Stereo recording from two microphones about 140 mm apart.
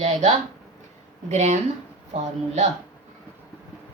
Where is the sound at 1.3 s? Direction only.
60° right (ahead or behind).